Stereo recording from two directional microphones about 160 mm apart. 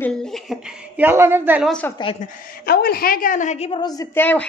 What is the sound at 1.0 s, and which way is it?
Speech, 15° right (ahead or behind).